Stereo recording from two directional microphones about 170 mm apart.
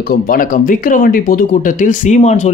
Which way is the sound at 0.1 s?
55° left (ahead or behind).